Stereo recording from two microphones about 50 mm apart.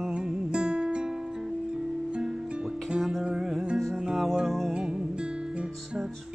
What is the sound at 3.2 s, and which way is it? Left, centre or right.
Music, centre.